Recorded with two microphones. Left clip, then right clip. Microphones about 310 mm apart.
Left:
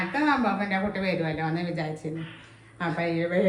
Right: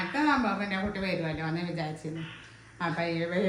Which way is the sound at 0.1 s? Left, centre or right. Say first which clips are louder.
Left 2 dB; centre.